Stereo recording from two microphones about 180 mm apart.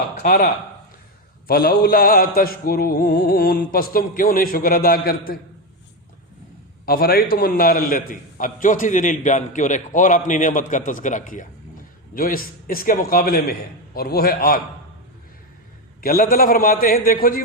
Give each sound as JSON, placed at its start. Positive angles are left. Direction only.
{"t": 0.2, "sound": "a man's voice", "side_deg": 55}
{"t": 1.5, "sound": "a man's voice", "side_deg": 55}
{"t": 6.8, "sound": "a man's voice", "side_deg": 55}
{"t": 16.0, "sound": "a man's voice", "side_deg": 55}